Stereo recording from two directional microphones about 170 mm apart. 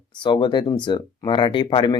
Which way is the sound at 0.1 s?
25° left (ahead or behind).